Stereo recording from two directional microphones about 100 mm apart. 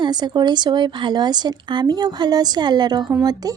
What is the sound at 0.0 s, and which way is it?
Speech, 45° right (ahead or behind).